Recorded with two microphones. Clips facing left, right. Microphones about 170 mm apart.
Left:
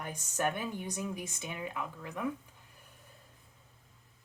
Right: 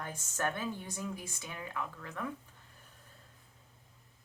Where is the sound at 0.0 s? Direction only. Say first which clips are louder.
Left 2 dB; 15° left (ahead or behind).